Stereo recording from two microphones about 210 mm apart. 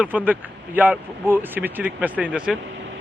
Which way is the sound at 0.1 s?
5° right (ahead or behind).